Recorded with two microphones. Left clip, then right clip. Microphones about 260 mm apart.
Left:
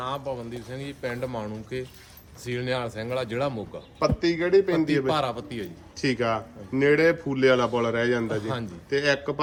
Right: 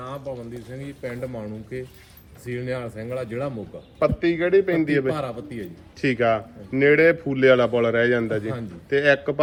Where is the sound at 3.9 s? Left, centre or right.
Centre.